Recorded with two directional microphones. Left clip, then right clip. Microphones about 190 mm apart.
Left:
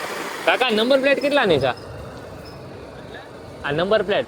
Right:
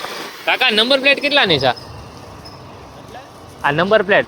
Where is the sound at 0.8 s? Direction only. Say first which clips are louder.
Right 4 dB; 30° right (ahead or behind).